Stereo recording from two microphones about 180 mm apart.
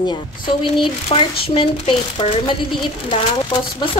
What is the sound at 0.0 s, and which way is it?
A woman's voice, 25° left (ahead or behind).